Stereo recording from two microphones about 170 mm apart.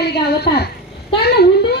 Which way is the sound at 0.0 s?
75° left (ahead or behind).